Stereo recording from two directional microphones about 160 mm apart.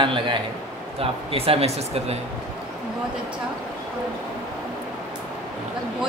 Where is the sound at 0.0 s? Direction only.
30° right (ahead or behind).